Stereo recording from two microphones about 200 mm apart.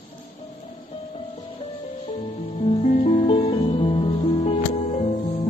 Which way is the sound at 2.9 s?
35° left (ahead or behind).